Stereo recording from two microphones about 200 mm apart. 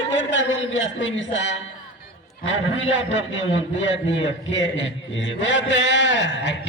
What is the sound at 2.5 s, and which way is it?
A man's voice, 65° left (ahead or behind).